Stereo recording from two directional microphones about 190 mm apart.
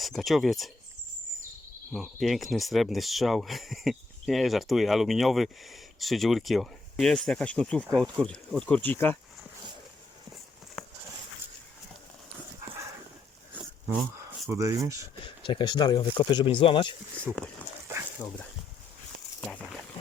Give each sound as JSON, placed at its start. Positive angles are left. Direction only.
{"t": 0.0, "sound": "speech", "side_deg": 0}
{"t": 2.2, "sound": "speech", "side_deg": 0}
{"t": 7.9, "sound": "speech", "side_deg": -20}
{"t": 8.1, "sound": "speech", "side_deg": 5}
{"t": 14.4, "sound": "speech", "side_deg": -15}
{"t": 15.2, "sound": "speech", "side_deg": 25}
{"t": 17.3, "sound": "speech", "side_deg": 5}
{"t": 17.9, "sound": "dog", "side_deg": -15}